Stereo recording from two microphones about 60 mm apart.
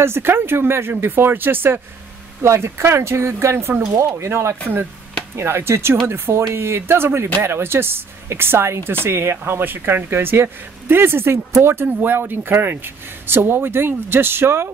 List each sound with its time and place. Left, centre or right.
0.0 s speech: right
2.4 s speech: right